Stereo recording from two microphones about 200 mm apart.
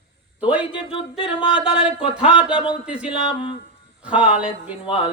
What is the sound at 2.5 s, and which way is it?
Speech, 25° left (ahead or behind).